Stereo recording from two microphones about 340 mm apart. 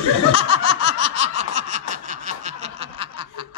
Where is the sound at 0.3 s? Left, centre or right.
Centre.